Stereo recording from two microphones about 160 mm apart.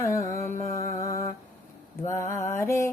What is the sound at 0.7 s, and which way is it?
Music, 20° left (ahead or behind).